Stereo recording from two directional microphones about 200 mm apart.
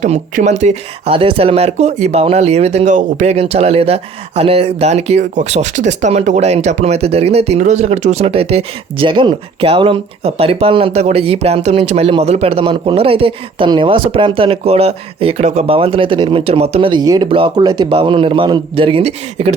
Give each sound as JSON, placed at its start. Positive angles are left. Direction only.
{"t": 0.0, "sound": "speech", "side_deg": -35}